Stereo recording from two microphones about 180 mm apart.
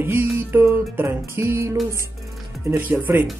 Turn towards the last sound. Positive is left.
turn(degrees=-10)  # may be behind; listen again after turning